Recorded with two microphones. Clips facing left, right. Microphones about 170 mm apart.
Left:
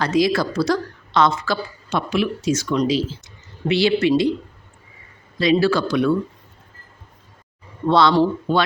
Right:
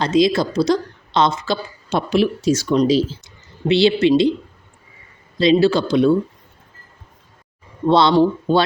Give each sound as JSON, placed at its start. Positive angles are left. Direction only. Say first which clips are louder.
{"t": 0.0, "sound": "a woman's voice", "louder": "right 2 dB", "side_deg": -20}
{"t": 2.0, "sound": "speech", "louder": "right 4 dB", "side_deg": -35}
{"t": 5.4, "sound": "speech", "louder": "right 3 dB", "side_deg": -25}
{"t": 7.9, "sound": "speech", "louder": "right 2 dB", "side_deg": -25}